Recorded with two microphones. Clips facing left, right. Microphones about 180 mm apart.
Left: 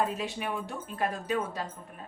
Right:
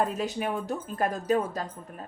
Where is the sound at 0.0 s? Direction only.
45° right (ahead or behind).